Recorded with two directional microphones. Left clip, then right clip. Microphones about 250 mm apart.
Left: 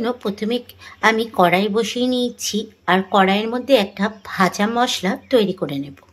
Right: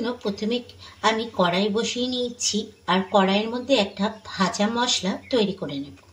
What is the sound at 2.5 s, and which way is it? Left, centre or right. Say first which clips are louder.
Speech: left 8 dB; left.